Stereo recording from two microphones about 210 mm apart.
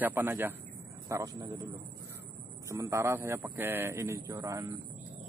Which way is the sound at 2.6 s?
15° right (ahead or behind).